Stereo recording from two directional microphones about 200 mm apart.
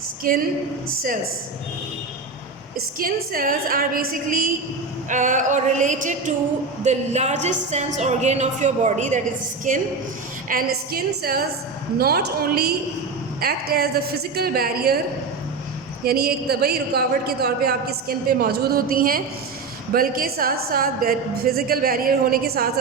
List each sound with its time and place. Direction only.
0.3 s a woman's voice: 45° right (ahead or behind)
3.0 s a woman's voice: 45° right (ahead or behind)
16.0 s a woman's voice: 50° right (ahead or behind)